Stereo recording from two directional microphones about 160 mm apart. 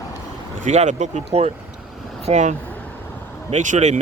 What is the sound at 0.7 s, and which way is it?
Speech, 45° right (ahead or behind).